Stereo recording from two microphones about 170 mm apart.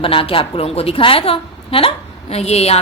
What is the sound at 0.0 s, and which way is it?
A woman's voice, 30° left (ahead or behind).